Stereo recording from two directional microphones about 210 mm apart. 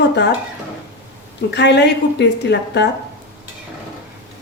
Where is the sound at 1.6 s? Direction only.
55° left (ahead or behind).